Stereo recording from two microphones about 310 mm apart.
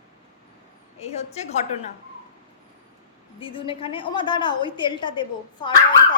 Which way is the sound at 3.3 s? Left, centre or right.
Centre.